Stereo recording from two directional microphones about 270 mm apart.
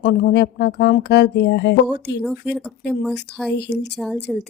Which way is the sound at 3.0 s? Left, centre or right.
Centre.